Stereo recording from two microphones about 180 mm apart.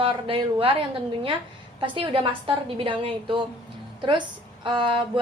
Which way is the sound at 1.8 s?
30° right (ahead or behind).